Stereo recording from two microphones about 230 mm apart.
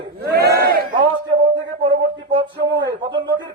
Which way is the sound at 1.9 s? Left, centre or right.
Right.